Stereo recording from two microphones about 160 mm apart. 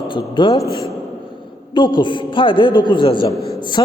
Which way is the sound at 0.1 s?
30° left (ahead or behind).